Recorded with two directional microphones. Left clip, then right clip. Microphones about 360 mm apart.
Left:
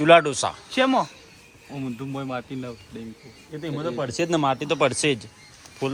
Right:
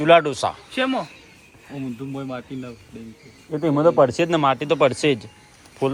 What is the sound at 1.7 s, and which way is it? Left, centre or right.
Speech, centre.